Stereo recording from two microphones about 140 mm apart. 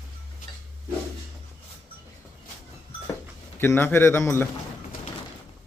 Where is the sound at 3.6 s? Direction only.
15° left (ahead or behind).